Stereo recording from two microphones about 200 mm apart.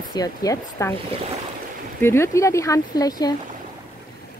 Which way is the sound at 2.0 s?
15° left (ahead or behind).